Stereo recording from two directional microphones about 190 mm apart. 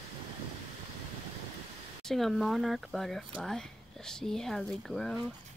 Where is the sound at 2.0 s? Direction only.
Centre (ahead or behind).